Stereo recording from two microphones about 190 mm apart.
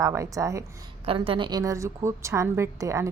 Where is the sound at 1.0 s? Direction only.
30° right (ahead or behind).